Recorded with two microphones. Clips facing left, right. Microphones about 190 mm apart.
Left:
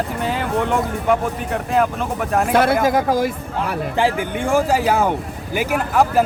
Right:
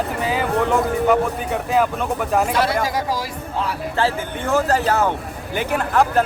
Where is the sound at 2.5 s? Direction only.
55° left (ahead or behind).